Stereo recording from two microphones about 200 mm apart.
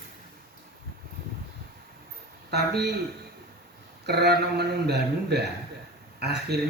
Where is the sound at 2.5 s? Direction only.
55° right (ahead or behind).